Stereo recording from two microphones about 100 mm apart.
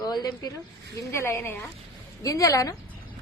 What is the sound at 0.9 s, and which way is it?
A woman's voice, 30° left (ahead or behind).